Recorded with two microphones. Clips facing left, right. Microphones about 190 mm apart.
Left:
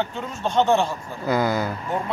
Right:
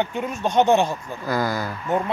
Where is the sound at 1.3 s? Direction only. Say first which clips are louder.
Left 2 dB; 20° left (ahead or behind).